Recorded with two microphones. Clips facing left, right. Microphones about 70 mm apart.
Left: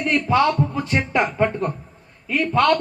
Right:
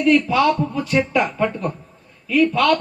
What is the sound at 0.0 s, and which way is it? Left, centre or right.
A man's voice, left.